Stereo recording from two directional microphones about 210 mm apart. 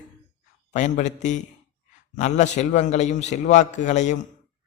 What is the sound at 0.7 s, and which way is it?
A man's voice, 35° left (ahead or behind).